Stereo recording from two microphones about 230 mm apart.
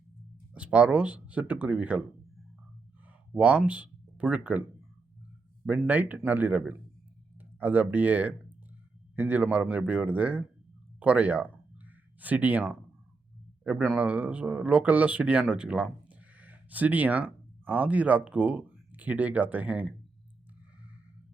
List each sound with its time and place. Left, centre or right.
0.5 s speech: centre
3.3 s speech: centre
5.6 s a man's voice: centre